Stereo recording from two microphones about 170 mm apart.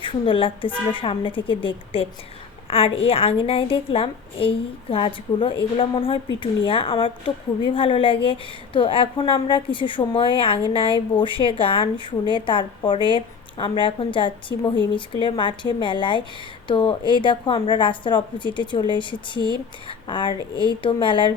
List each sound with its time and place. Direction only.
0.0 s a woman's voice: 30° left (ahead or behind)